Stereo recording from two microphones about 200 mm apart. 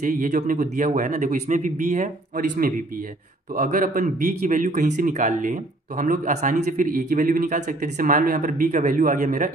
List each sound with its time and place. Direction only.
0.0 s a man's voice: 40° right (ahead or behind)